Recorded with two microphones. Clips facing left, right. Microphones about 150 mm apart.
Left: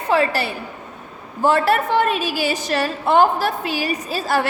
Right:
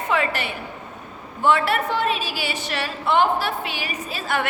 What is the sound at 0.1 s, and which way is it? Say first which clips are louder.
A woman's voice: left 6 dB; 35° left (ahead or behind).